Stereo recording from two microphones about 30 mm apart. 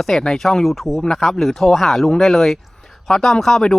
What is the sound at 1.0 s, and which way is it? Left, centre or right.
Speech, centre.